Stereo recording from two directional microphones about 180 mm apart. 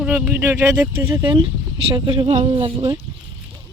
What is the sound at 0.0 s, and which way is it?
Speech, 10° right (ahead or behind).